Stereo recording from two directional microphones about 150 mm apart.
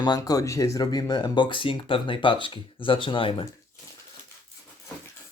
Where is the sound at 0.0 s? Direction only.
25° left (ahead or behind).